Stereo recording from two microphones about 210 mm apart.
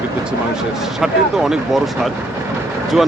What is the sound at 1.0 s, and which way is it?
Speech, centre (ahead or behind).